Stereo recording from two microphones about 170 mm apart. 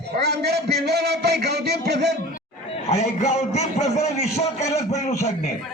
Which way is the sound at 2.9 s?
40° left (ahead or behind).